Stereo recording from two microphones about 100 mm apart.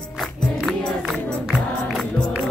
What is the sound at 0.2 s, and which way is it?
Music, centre (ahead or behind).